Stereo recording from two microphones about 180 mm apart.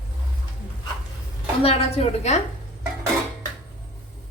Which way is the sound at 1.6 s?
35° left (ahead or behind).